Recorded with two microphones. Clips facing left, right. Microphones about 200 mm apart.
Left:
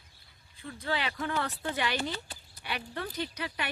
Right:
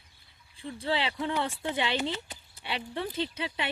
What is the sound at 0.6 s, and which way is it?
Speech, 30° right (ahead or behind).